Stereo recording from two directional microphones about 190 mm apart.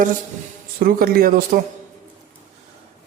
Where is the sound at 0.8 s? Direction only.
50° right (ahead or behind).